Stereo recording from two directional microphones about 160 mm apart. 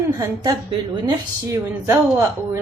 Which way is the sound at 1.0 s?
20° right (ahead or behind).